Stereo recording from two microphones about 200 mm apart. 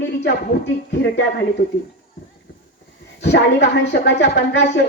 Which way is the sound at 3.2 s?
55° left (ahead or behind).